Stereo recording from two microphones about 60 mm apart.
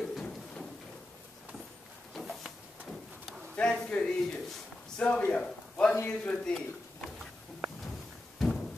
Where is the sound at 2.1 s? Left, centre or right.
Centre.